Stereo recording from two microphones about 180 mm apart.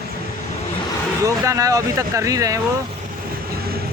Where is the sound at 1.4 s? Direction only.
20° right (ahead or behind).